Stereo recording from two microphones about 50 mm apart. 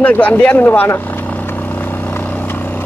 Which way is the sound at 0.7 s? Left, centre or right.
Left.